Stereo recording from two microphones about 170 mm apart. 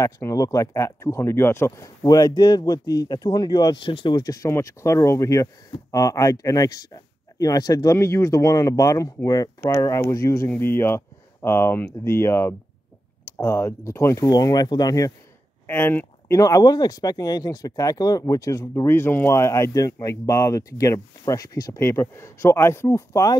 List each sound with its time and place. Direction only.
0.0 s speech: 20° left (ahead or behind)